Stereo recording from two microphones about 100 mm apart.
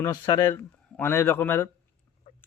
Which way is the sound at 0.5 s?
25° left (ahead or behind).